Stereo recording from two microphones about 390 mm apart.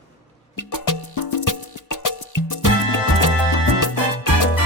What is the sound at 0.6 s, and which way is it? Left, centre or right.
Music, left.